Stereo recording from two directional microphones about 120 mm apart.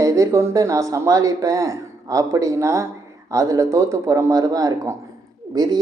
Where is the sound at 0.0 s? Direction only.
25° right (ahead or behind).